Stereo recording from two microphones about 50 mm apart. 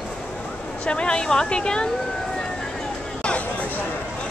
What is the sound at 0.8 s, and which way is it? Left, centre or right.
Speech, centre.